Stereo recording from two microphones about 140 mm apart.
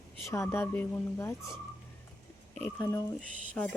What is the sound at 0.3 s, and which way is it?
Speech, 20° left (ahead or behind).